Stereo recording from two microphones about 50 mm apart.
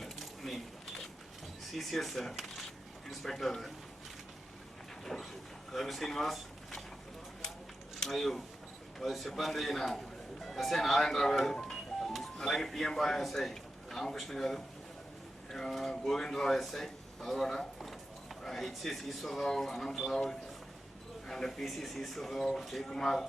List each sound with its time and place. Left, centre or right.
0.0 s a sound: centre
1.7 s speech: centre
5.7 s speech: centre
7.9 s speech: centre
11.6 s music: centre
12.4 s a man's voice: centre
21.2 s a man's voice: centre